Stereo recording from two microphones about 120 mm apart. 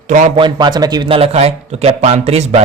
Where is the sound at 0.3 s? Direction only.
40° right (ahead or behind).